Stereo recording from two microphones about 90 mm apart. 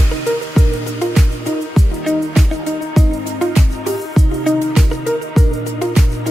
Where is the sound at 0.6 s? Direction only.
Centre (ahead or behind).